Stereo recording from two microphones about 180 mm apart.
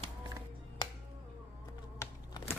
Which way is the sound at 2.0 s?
15° left (ahead or behind).